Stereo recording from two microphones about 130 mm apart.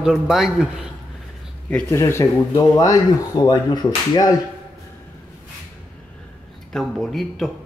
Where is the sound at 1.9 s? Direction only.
20° left (ahead or behind).